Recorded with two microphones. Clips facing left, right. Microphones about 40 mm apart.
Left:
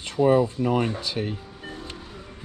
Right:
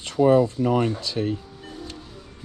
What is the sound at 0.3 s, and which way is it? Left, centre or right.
Speech, left.